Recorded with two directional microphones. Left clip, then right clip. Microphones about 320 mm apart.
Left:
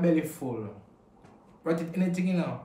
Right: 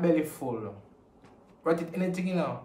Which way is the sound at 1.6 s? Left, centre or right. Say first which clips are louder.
Right 2 dB; centre.